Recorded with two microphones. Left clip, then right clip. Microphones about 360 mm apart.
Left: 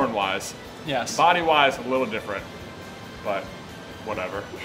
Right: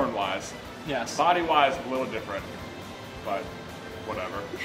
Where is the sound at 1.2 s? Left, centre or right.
Left.